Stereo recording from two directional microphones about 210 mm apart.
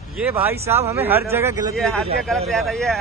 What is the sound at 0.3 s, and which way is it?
Speech, 10° right (ahead or behind).